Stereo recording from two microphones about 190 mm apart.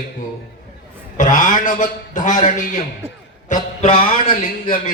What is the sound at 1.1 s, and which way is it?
A man's voice, 45° left (ahead or behind).